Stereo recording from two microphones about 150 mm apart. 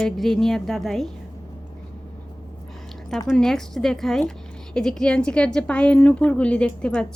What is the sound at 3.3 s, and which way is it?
A woman's voice, 5° left (ahead or behind).